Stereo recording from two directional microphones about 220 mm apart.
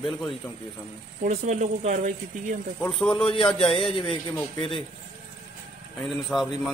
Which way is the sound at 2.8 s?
5° left (ahead or behind).